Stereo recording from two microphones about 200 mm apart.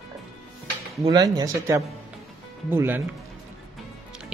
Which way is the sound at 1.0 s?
20° right (ahead or behind).